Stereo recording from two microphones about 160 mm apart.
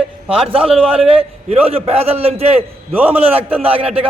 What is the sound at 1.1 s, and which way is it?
A man's voice, 35° right (ahead or behind).